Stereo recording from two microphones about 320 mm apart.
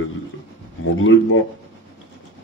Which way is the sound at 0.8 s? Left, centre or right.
Left.